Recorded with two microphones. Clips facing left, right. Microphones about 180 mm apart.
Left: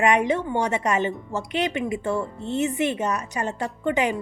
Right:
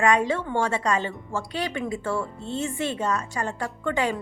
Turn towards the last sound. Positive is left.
turn(degrees=20)  # may be behind; listen again after turning